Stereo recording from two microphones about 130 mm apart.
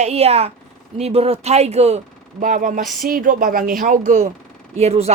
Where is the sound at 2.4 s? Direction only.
80° right.